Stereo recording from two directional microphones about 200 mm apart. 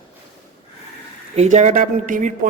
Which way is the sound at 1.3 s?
35° right (ahead or behind).